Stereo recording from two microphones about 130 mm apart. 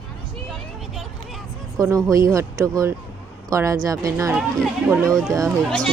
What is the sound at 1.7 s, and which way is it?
Speech, 25° right (ahead or behind).